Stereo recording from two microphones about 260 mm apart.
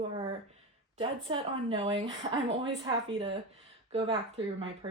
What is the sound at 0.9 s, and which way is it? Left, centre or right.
A woman's voice, centre.